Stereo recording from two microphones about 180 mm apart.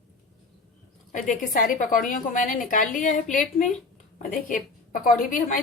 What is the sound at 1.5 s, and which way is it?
A woman's voice, 50° left (ahead or behind).